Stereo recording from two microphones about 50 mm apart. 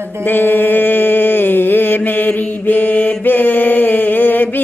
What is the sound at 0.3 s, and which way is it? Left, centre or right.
Mantra, left.